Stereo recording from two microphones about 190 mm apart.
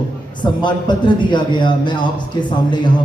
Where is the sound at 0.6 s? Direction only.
25° left (ahead or behind).